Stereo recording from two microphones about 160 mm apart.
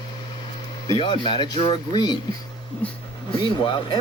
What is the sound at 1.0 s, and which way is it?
Speech, 30° left (ahead or behind).